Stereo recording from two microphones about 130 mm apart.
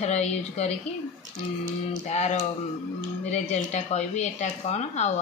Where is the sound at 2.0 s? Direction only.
60° left (ahead or behind).